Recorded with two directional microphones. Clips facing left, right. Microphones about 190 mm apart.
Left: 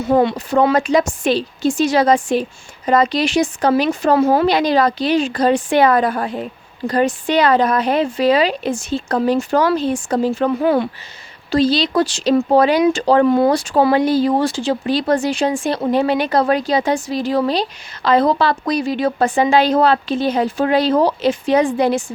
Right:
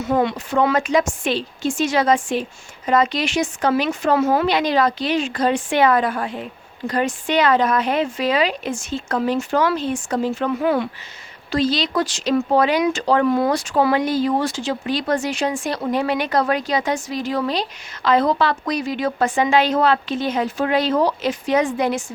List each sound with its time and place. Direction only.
0.0 s a woman's voice: 30° left (ahead or behind)